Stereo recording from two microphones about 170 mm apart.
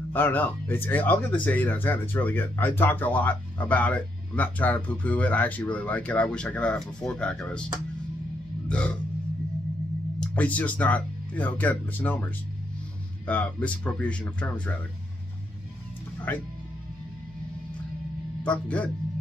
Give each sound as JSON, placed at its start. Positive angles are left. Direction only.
{"t": 0.1, "sound": "speech", "side_deg": 10}
{"t": 8.6, "sound": "burping", "side_deg": 5}
{"t": 10.2, "sound": "speech", "side_deg": 10}
{"t": 13.3, "sound": "speech", "side_deg": 10}
{"t": 16.3, "sound": "speech", "side_deg": 10}
{"t": 18.4, "sound": "speech", "side_deg": 5}